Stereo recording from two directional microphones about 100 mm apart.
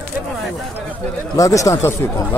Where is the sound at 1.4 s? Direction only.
35° left (ahead or behind).